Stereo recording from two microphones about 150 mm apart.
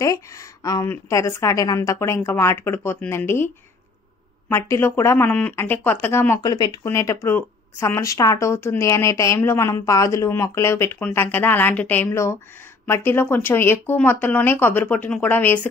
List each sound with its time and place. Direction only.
0.0 s speech: 20° left (ahead or behind)